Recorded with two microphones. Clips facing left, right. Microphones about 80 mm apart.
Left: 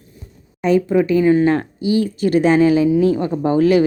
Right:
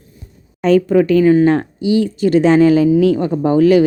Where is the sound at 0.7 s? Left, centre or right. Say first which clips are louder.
Right 3 dB; right.